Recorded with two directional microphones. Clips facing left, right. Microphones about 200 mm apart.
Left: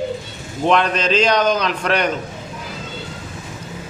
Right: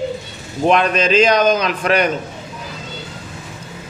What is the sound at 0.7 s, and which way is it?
A man's voice, 10° right (ahead or behind).